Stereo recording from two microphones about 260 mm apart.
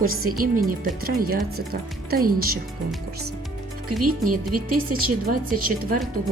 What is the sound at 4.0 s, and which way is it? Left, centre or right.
Speech, right.